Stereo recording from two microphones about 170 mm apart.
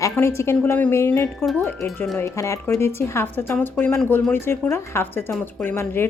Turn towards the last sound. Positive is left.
turn(degrees=15)  # may be behind; listen again after turning